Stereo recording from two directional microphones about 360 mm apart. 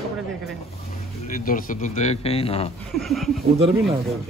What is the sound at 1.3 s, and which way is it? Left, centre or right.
A man's voice, left.